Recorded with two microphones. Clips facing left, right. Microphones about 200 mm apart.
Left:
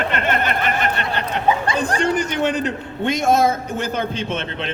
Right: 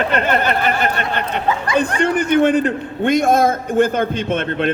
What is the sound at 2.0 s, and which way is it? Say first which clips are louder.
A man's voice: right 7 dB; 55° right (ahead or behind).